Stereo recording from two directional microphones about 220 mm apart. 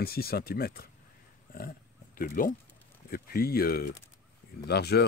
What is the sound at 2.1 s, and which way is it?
Speech, 40° left (ahead or behind).